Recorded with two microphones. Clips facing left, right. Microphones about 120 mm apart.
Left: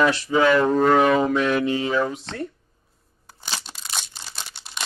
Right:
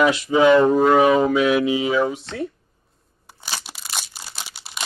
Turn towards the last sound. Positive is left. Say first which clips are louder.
# right 1 dB
turn(degrees=-5)  # may be behind; listen again after turning